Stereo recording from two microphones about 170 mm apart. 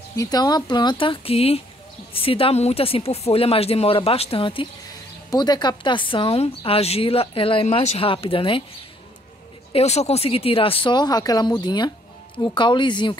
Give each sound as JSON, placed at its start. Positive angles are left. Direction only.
{"t": 0.1, "sound": "a woman's voice", "side_deg": 20}
{"t": 9.7, "sound": "a woman's voice", "side_deg": 40}